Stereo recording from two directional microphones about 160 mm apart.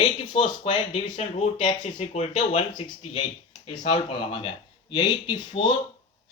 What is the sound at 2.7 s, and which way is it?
Speech, 35° left (ahead or behind).